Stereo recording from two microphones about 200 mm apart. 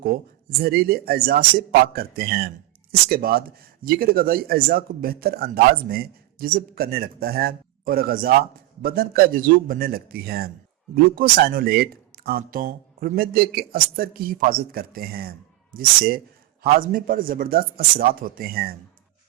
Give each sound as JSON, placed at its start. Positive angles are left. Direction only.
{"t": 0.6, "sound": "speech", "side_deg": -50}